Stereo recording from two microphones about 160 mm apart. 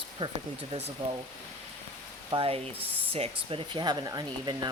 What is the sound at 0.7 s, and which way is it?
Speech, 40° right (ahead or behind).